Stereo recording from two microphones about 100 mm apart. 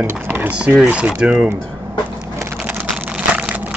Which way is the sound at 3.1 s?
10° right (ahead or behind).